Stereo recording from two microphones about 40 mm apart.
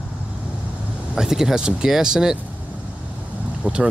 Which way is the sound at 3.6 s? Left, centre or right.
Right.